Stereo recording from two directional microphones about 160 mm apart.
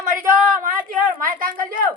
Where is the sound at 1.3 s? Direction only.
65° right (ahead or behind).